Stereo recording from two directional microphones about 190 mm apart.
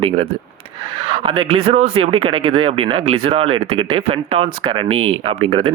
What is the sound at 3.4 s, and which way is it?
Speech, 90° right.